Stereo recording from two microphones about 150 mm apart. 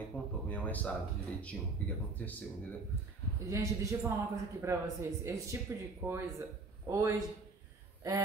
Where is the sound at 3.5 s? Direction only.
20° right (ahead or behind).